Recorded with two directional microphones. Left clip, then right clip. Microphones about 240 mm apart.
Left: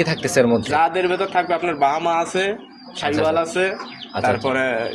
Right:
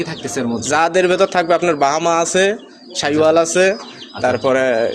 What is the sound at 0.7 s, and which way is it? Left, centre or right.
Speech, right.